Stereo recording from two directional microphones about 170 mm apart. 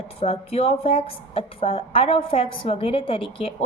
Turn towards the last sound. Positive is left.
turn(degrees=30)  # may be behind; listen again after turning